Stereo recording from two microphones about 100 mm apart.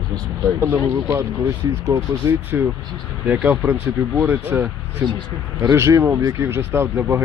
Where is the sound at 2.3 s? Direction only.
20° right (ahead or behind).